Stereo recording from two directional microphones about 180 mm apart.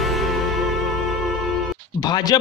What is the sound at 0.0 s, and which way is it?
Music, centre (ahead or behind).